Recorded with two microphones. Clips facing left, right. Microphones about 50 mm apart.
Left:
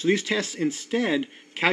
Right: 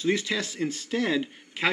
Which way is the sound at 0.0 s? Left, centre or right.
Left.